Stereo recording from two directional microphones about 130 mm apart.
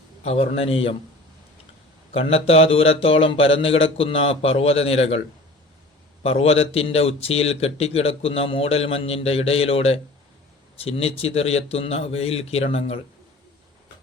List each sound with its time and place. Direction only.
0.3 s speech: 50° left (ahead or behind)
2.1 s speech: 50° left (ahead or behind)
6.2 s speech: 50° left (ahead or behind)